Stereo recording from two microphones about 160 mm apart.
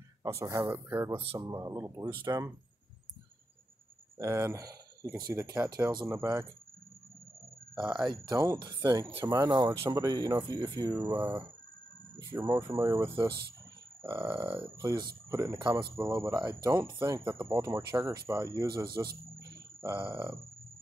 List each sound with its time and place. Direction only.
0.2 s speech: 20° right (ahead or behind)
4.2 s speech: 15° right (ahead or behind)
7.7 s speech: 30° right (ahead or behind)
11.1 s speech: 10° right (ahead or behind)